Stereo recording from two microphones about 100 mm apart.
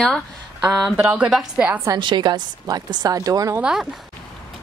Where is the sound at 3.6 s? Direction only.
5° right (ahead or behind).